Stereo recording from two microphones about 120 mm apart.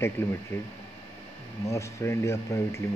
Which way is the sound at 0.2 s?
20° left (ahead or behind).